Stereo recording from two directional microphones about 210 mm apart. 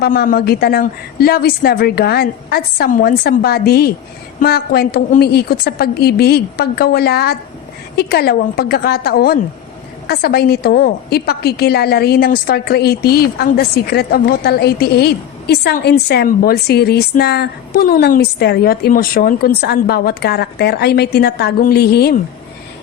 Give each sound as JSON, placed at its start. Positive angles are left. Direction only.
{"t": 0.0, "sound": "a woman's voice", "side_deg": 45}